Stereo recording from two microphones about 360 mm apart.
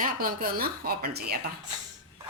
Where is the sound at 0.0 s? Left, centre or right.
Right.